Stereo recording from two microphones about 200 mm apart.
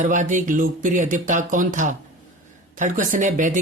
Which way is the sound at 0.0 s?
40° right (ahead or behind).